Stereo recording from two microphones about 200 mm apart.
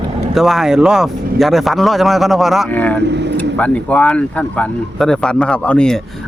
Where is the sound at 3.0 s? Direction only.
60° right (ahead or behind).